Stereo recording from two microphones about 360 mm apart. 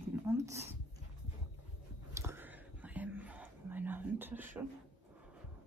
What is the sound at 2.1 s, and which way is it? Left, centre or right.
Whispering, centre.